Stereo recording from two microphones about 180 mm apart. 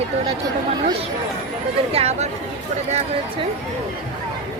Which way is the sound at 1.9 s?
35° right (ahead or behind).